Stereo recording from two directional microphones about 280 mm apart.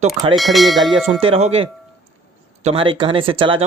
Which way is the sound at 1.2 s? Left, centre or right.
Right.